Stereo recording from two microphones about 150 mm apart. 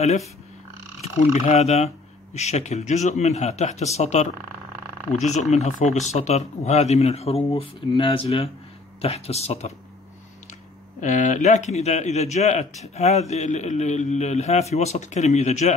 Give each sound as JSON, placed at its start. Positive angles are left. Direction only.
{"t": 1.0, "sound": "speech", "side_deg": 50}
{"t": 11.0, "sound": "speech", "side_deg": 55}